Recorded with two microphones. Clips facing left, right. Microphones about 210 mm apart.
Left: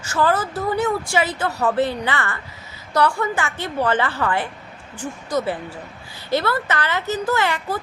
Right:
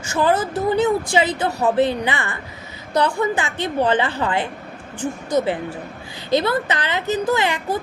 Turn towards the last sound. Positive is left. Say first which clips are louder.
# right 2 dB
turn(degrees=-15)  # may be behind; listen again after turning